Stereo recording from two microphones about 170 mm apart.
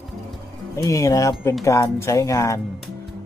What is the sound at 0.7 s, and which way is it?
Speech, 20° left (ahead or behind).